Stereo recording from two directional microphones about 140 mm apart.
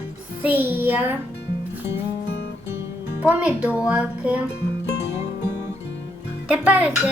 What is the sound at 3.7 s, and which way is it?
Speech, 10° right (ahead or behind).